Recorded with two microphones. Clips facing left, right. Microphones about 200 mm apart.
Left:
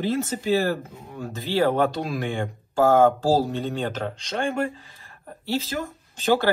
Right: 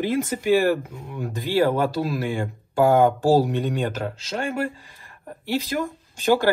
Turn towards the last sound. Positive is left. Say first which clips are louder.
# right 2 dB
turn(degrees=-10)  # may be behind; listen again after turning